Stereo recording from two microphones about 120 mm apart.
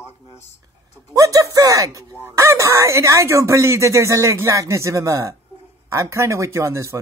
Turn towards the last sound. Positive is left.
turn(degrees=-25)  # may be behind; listen again after turning